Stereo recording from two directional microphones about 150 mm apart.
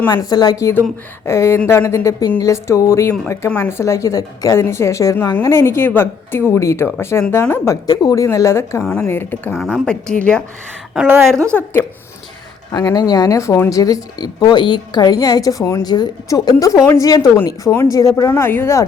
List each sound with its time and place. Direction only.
0.1 s speech: 25° left (ahead or behind)
9.5 s a woman's voice: centre (ahead or behind)
10.9 s a woman's voice: 15° right (ahead or behind)
11.5 s speech: 10° left (ahead or behind)
12.7 s speech: 25° left (ahead or behind)
17.7 s speech: 5° left (ahead or behind)
18.2 s speech: 20° left (ahead or behind)